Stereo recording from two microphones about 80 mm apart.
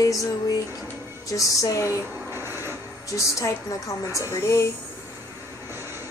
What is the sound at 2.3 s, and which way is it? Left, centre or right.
Printer, right.